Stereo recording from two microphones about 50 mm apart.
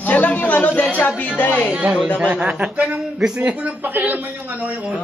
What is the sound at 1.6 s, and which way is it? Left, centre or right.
Speech, centre.